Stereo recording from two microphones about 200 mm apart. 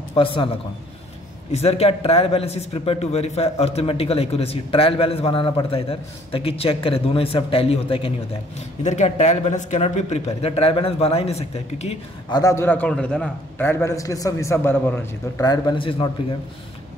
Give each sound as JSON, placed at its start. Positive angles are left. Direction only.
{"t": 0.1, "sound": "a man's voice", "side_deg": 25}
{"t": 1.5, "sound": "speech", "side_deg": 30}
{"t": 12.4, "sound": "a man's voice", "side_deg": 15}